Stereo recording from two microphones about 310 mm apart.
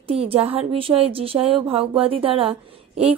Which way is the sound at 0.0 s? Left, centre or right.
Centre.